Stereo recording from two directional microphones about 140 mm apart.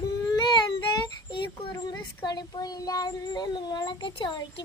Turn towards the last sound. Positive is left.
turn(degrees=35)  # may be behind; listen again after turning